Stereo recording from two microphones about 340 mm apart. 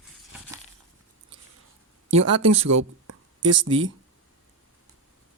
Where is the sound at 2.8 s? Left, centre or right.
Right.